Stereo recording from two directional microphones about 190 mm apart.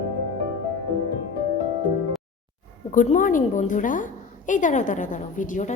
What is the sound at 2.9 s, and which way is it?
A woman's voice, 45° left (ahead or behind).